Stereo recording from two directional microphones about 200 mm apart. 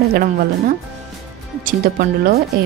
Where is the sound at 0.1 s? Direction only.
45° right (ahead or behind).